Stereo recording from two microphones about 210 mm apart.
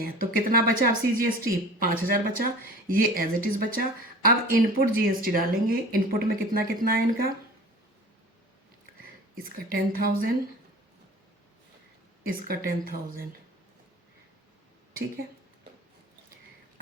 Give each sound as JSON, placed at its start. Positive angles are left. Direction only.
{"t": 0.0, "sound": "speech", "side_deg": -45}
{"t": 9.4, "sound": "speech", "side_deg": -45}
{"t": 12.3, "sound": "speech", "side_deg": -45}